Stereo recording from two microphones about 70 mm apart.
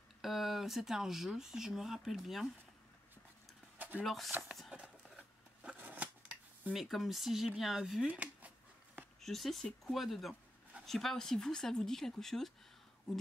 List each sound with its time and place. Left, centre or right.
0.2 s speech: centre
3.7 s a sound: right
4.0 s speech: centre
4.7 s a sound: centre
5.8 s scissors: right
6.7 s speech: centre
8.1 s speech: right
9.2 s speech: centre